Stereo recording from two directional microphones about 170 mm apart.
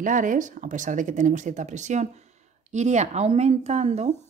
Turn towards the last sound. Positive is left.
turn(degrees=-40)  # may be behind; listen again after turning